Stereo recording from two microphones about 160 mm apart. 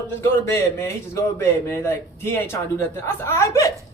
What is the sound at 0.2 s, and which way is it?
A man's voice, 20° left (ahead or behind).